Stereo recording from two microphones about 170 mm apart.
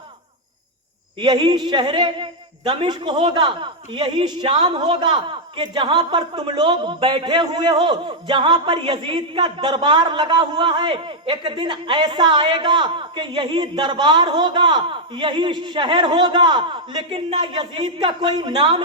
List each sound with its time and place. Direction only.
1.2 s a woman's voice: 25° right (ahead or behind)